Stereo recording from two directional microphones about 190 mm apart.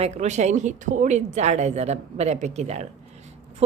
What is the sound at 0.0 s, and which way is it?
A woman's voice, 35° right (ahead or behind).